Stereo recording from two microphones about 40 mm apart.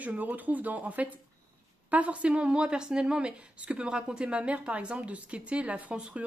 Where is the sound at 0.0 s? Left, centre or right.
Right.